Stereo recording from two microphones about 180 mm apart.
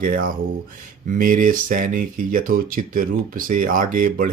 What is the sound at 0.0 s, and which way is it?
Speech, 50° right (ahead or behind).